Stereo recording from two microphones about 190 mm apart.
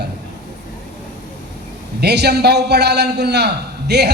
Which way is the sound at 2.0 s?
60° right (ahead or behind).